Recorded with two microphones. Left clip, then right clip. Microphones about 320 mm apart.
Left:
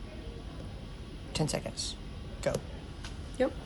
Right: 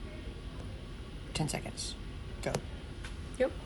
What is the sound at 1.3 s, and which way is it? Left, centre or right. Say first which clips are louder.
Speech: left 4 dB; centre.